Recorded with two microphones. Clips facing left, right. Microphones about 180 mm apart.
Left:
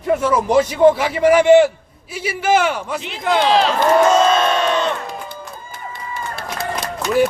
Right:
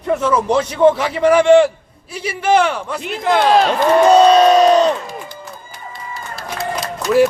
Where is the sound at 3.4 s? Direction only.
50° right (ahead or behind).